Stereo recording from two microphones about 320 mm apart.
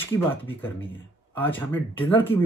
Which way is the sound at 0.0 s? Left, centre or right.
Centre.